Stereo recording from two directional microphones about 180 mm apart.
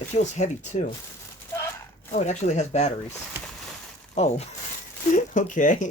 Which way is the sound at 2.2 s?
40° left (ahead or behind).